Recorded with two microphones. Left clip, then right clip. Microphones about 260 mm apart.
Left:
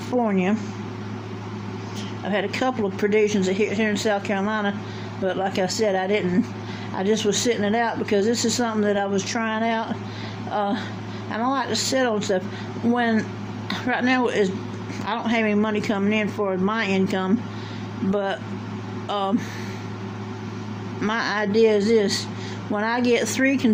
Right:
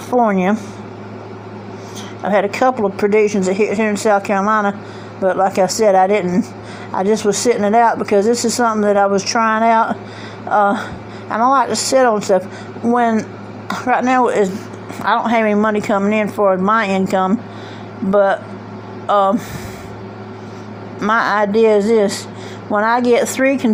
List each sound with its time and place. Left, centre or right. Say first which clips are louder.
0.2 s speech: right 9 dB; centre
2.2 s speech: right 10 dB; centre
21.0 s speech: right 10 dB; centre